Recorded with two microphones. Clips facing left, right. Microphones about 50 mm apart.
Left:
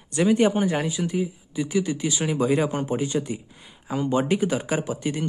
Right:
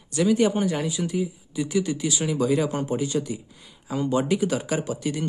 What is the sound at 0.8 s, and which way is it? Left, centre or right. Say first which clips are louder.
Speech: left 1 dB; centre.